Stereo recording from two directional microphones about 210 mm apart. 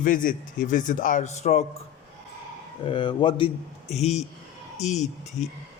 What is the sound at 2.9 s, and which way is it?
A man's voice, 20° left (ahead or behind).